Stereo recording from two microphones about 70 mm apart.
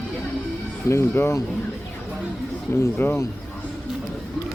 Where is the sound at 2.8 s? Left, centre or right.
Left.